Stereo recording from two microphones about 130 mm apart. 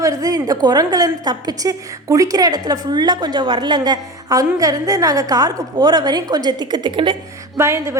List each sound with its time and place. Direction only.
0.0 s a woman's voice: 25° right (ahead or behind)
7.5 s a woman's voice: 20° right (ahead or behind)